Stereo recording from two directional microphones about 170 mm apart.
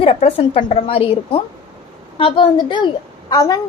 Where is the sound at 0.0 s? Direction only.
35° left (ahead or behind).